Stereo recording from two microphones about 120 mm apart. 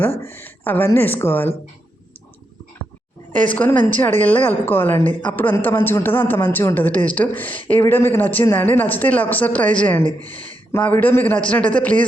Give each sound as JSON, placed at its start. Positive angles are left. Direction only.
{"t": 0.3, "sound": "a woman's voice", "side_deg": 15}
{"t": 3.5, "sound": "a woman's voice", "side_deg": 15}